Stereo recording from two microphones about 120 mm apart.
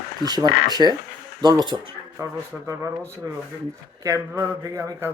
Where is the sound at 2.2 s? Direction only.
25° right (ahead or behind).